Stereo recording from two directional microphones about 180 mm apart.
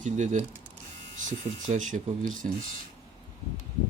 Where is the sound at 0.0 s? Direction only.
45° right (ahead or behind).